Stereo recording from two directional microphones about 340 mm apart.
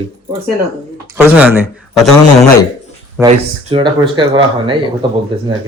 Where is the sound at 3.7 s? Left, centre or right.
Centre.